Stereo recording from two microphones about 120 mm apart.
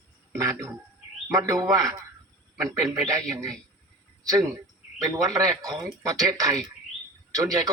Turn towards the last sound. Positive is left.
turn(degrees=-30)  # may be behind; listen again after turning